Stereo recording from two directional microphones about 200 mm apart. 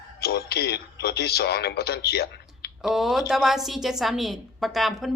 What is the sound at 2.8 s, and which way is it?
A woman's voice, centre (ahead or behind).